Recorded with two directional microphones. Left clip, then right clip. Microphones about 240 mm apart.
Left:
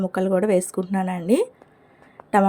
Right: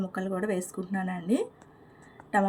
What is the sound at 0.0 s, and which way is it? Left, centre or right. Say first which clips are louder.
A woman's voice: left 11 dB; left.